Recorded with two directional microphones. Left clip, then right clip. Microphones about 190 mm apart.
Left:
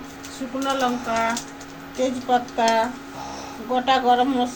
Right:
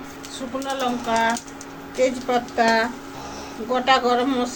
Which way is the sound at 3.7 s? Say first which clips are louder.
Even; 40° right (ahead or behind).